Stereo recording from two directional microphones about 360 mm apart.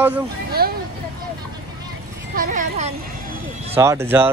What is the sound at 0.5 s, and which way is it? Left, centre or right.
Speech, right.